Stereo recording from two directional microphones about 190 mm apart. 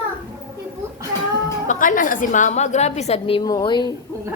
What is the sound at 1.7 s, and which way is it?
A woman's voice, 45° left (ahead or behind).